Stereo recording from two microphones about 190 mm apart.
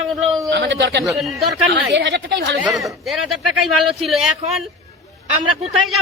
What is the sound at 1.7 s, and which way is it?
Speech, 70° right (ahead or behind).